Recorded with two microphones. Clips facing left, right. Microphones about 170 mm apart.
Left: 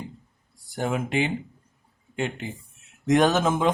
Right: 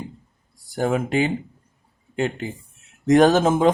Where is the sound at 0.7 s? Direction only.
40° right (ahead or behind).